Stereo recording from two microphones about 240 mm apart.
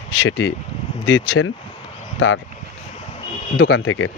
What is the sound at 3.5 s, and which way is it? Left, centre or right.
Speech, left.